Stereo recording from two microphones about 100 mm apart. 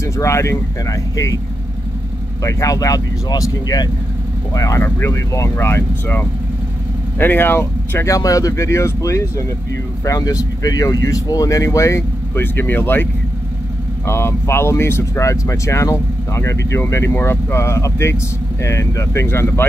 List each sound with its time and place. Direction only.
0.0 s speech: 30° left (ahead or behind)
2.4 s speech: 35° left (ahead or behind)